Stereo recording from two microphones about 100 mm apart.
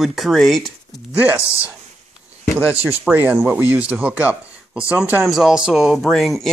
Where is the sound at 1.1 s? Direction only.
15° right (ahead or behind).